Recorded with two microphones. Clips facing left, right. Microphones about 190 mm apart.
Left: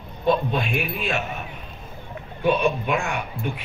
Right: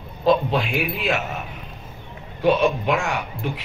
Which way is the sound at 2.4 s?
85° right.